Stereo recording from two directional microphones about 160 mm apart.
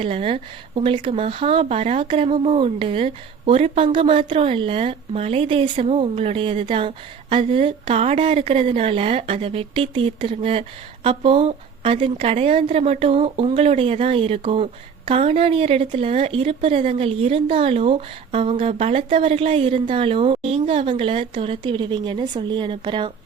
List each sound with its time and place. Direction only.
0.0 s a woman's voice: 35° right (ahead or behind)